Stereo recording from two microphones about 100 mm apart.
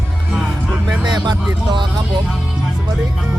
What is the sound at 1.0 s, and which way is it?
Speech, 45° right (ahead or behind).